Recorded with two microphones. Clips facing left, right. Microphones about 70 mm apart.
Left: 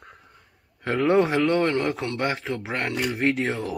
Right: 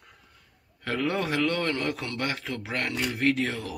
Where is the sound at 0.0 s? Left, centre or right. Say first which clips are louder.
Left 7 dB; left.